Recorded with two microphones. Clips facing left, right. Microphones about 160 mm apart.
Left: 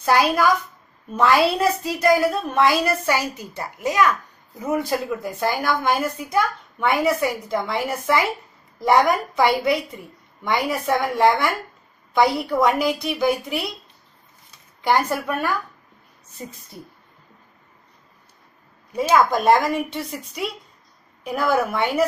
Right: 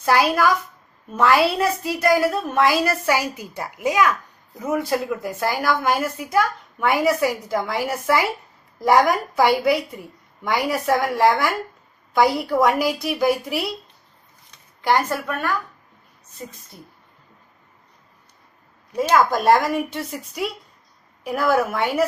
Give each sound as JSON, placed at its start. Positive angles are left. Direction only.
{"t": 0.0, "sound": "a woman's voice", "side_deg": -5}
{"t": 14.8, "sound": "speech", "side_deg": 0}
{"t": 18.9, "sound": "a woman's voice", "side_deg": 0}